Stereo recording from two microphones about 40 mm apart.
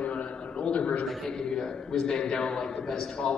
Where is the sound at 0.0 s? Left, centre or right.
Left.